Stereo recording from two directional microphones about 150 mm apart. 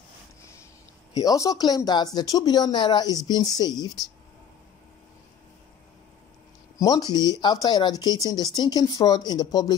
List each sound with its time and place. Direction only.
1.1 s speech: 25° left (ahead or behind)
6.8 s speech: 25° left (ahead or behind)